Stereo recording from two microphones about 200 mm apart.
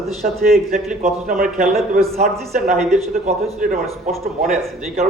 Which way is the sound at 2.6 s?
35° right (ahead or behind).